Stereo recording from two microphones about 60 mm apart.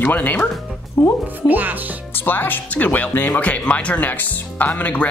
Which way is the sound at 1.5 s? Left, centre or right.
Right.